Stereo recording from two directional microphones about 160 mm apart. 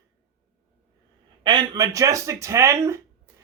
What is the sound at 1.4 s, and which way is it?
Speech, 25° right (ahead or behind).